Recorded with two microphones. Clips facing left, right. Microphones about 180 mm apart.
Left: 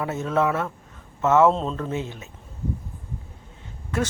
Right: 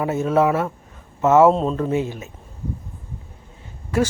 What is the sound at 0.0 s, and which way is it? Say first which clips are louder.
A woman's voice: right 5 dB; 15° right (ahead or behind).